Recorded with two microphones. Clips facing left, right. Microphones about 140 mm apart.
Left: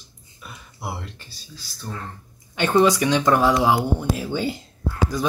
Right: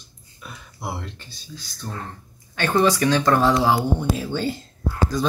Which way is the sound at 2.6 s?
15° left (ahead or behind).